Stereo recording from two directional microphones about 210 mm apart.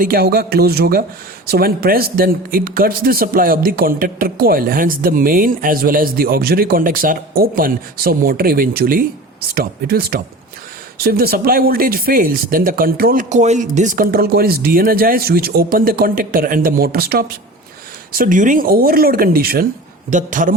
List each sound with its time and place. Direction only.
0.0 s speech: 45° right (ahead or behind)